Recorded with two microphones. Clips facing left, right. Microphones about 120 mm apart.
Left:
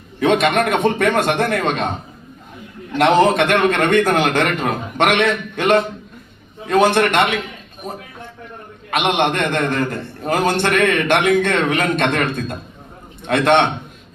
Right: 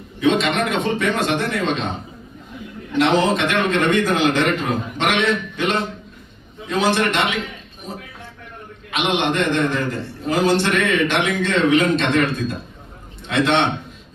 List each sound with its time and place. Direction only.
0.2 s a man's voice: 55° left (ahead or behind)
3.0 s a man's voice: 55° left (ahead or behind)